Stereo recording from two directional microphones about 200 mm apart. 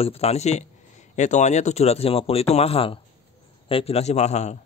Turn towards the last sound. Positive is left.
turn(degrees=35)  # may be behind; listen again after turning